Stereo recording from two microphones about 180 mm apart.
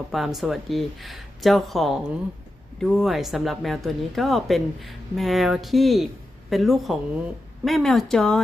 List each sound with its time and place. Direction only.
0.1 s speech: centre (ahead or behind)